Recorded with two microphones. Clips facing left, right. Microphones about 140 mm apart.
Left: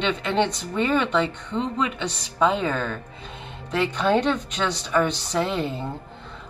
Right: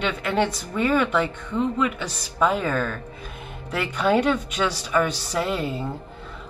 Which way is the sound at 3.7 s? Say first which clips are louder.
Even; 10° right (ahead or behind).